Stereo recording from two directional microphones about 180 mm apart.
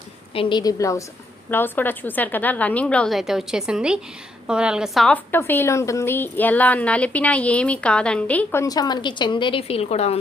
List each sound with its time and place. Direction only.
0.3 s a woman's voice: 25° left (ahead or behind); by 8.6 s 10° left (ahead or behind)
8.6 s a woman's voice: 20° left (ahead or behind)